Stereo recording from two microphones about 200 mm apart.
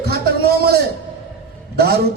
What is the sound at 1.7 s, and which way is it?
Speech, 55° right (ahead or behind).